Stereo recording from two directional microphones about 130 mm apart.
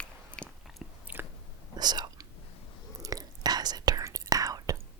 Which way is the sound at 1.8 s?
30° right (ahead or behind).